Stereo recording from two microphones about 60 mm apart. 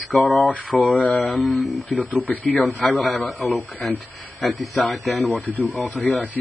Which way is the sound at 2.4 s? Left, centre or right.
Left.